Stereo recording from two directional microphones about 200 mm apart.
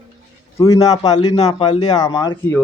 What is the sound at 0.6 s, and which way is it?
Speech, 15° left (ahead or behind).